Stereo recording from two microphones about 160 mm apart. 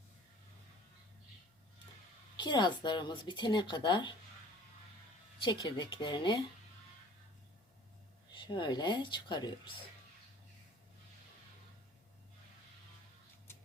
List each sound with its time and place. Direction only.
2.3 s a woman's voice: 30° left (ahead or behind)
5.4 s a woman's voice: 30° left (ahead or behind)
8.3 s a woman's voice: 30° left (ahead or behind)